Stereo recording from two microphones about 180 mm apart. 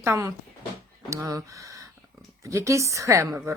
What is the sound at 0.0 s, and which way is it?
Speech, 15° right (ahead or behind).